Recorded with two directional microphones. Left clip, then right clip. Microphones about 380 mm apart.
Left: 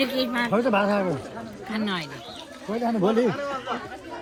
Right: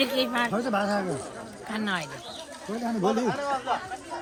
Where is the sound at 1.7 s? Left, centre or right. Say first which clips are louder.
Left 1 dB; centre.